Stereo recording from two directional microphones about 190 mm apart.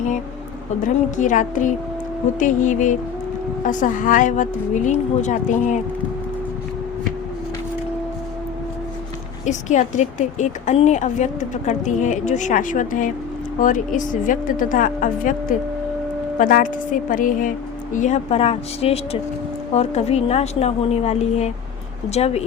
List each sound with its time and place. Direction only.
0.8 s a woman's voice: 40° left (ahead or behind)
9.5 s a woman's voice: 40° left (ahead or behind)